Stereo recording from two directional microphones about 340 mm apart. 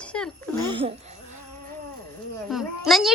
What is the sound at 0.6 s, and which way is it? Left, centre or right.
Speech, centre.